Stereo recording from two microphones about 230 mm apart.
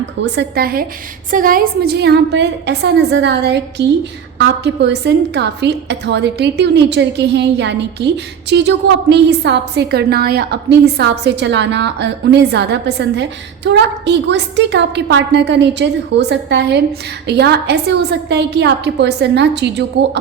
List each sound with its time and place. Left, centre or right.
0.2 s a woman's voice: right